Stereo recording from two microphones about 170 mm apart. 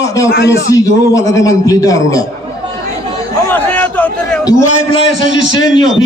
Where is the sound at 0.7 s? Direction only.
20° left (ahead or behind).